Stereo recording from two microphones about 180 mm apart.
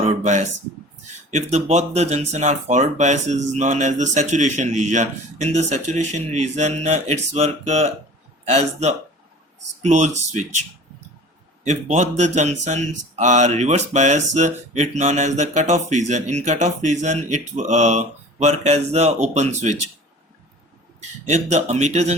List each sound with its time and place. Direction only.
0.2 s speech: 40° right (ahead or behind)
11.6 s speech: 40° right (ahead or behind)
21.2 s speech: 40° right (ahead or behind)